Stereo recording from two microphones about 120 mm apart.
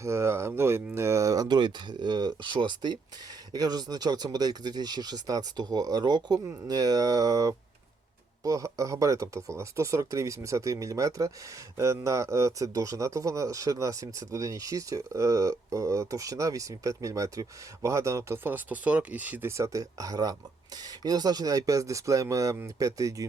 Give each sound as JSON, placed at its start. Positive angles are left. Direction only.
{"t": 0.0, "sound": "speech", "side_deg": -25}